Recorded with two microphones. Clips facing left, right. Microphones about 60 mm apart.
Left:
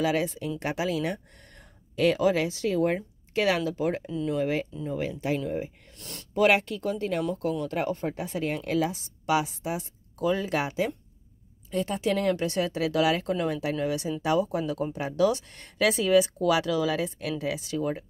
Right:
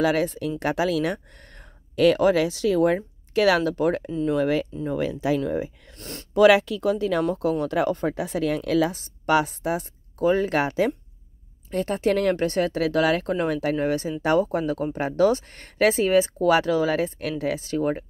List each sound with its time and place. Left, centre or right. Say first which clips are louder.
0.0 s speech: right 4 dB; right
4.4 s speech: right 5 dB; right
5.9 s speech: right 7 dB; right
6.3 s speech: right 6 dB; right
10.1 s speech: right 5 dB; right
13.7 s speech: right 4 dB; right